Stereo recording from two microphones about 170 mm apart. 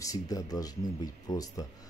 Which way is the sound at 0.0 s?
20° left (ahead or behind).